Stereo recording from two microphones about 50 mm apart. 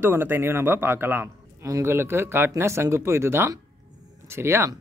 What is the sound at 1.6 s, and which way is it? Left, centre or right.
Speech, right.